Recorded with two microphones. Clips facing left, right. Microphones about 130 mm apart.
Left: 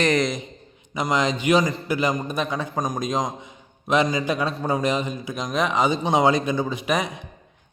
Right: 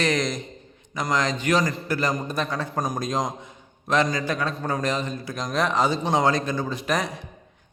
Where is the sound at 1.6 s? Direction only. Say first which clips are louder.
Left 2 dB; centre (ahead or behind).